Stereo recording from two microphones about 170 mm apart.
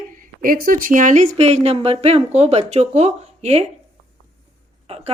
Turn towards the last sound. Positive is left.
turn(degrees=-35)  # may be behind; listen again after turning